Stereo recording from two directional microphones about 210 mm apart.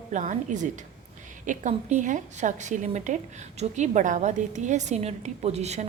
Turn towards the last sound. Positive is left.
turn(degrees=-30)  # may be behind; listen again after turning